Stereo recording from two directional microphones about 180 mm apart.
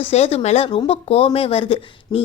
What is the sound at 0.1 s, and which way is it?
Speech, 35° left (ahead or behind).